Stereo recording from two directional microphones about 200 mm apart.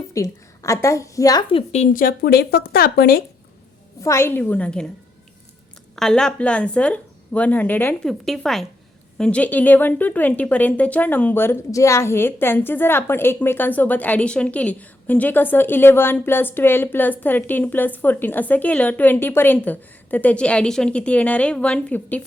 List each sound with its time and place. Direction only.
0.1 s a woman's voice: 15° left (ahead or behind); by 3.2 s 50° left (ahead or behind)
4.0 s a woman's voice: 15° left (ahead or behind)
6.0 s a woman's voice: 5° left (ahead or behind)